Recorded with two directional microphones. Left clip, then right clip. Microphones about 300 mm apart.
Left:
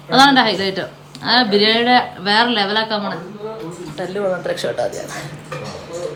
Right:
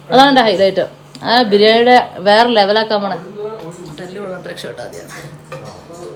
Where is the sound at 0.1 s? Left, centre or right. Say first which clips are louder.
Right 3 dB; centre.